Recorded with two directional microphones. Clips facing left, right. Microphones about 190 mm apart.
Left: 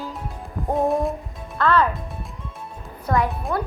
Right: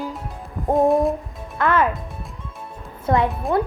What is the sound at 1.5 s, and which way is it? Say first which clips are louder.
Speech: even; 20° right (ahead or behind).